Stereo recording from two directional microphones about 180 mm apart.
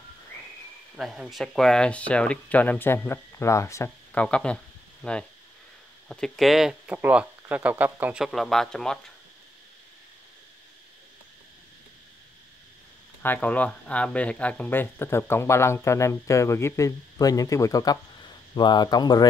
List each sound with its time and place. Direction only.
0.9 s speech: centre (ahead or behind)
13.2 s speech: 10° left (ahead or behind)